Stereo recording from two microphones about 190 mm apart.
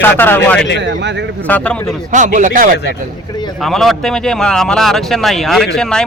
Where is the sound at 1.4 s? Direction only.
5° left (ahead or behind).